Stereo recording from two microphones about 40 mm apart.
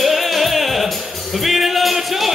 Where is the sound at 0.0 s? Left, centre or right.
Centre.